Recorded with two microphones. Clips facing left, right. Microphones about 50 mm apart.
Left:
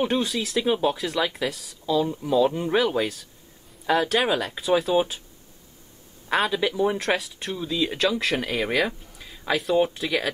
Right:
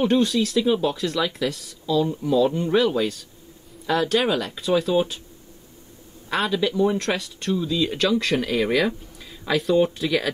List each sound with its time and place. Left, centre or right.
0.0 s speech: centre
0.7 s speech: centre
0.9 s speech: centre
6.3 s speech: centre